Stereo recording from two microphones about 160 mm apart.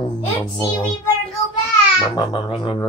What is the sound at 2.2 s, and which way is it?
Speech, 30° left (ahead or behind).